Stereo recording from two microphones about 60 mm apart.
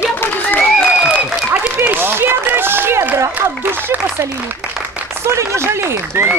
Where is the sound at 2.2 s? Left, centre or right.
Right.